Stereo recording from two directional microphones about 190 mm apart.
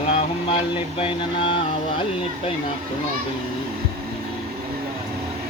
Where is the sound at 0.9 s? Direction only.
30° left (ahead or behind).